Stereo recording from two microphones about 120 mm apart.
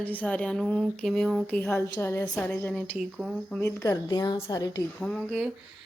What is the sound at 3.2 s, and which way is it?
Speech, 5° right (ahead or behind).